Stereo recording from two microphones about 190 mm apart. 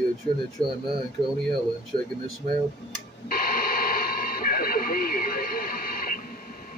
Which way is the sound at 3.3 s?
50° left (ahead or behind).